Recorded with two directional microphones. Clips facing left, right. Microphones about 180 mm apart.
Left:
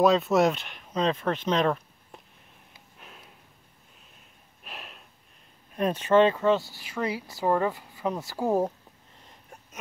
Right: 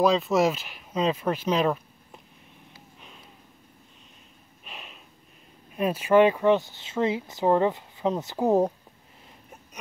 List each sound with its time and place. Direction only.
0.0 s speech: centre (ahead or behind)
3.0 s a sound: 5° left (ahead or behind)
4.6 s snort: centre (ahead or behind)
5.8 s speech: 10° right (ahead or behind)